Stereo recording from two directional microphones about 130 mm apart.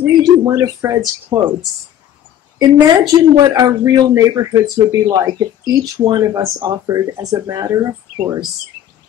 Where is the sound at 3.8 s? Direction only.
25° right (ahead or behind).